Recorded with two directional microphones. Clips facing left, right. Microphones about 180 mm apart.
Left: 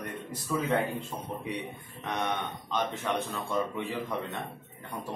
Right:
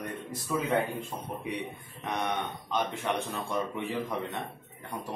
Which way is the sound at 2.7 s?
15° right (ahead or behind).